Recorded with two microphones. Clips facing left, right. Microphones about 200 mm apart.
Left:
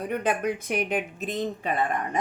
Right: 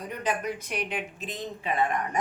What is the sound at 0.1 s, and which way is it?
Speech, 55° left (ahead or behind).